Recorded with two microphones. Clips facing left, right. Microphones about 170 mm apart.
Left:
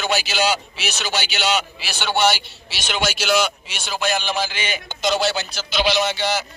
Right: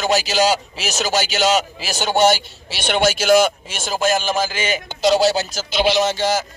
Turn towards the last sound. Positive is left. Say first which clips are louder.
# right 3 dB
turn(degrees=-45)  # may be behind; listen again after turning